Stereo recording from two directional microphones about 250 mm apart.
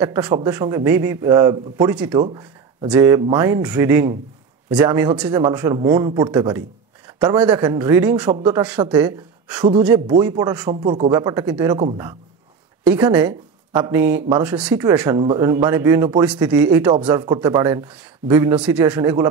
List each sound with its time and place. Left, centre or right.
0.0 s speech: centre
16.9 s speech: centre